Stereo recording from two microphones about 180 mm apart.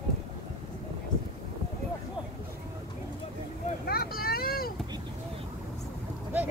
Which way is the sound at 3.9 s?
55° left (ahead or behind).